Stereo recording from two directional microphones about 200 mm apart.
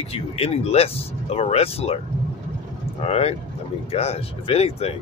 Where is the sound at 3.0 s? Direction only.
30° left (ahead or behind).